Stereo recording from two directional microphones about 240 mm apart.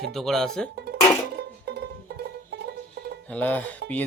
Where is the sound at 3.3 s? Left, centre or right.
Centre.